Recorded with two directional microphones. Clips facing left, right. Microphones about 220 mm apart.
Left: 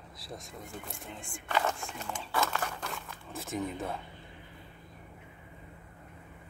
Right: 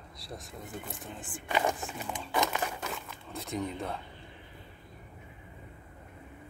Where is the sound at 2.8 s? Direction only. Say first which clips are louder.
Right 2 dB; centre (ahead or behind).